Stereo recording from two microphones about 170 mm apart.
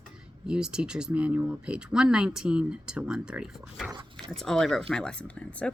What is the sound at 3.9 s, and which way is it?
Dog, 30° right (ahead or behind).